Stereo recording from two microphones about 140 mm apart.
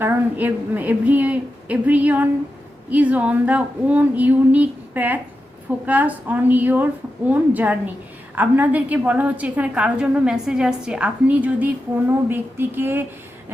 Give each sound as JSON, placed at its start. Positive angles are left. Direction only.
{"t": 0.0, "sound": "a woman's voice", "side_deg": -15}